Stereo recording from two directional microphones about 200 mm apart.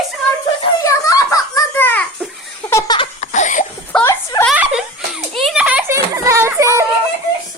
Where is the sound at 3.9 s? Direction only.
15° left (ahead or behind).